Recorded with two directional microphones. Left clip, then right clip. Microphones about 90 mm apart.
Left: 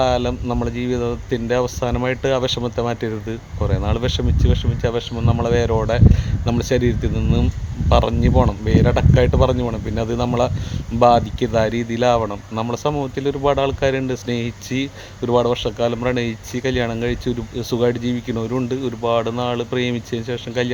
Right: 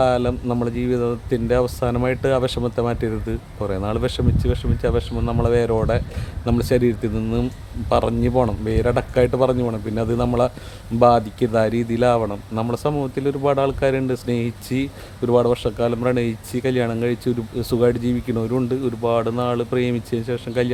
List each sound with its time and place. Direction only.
0.0 s speech: 30° right (ahead or behind)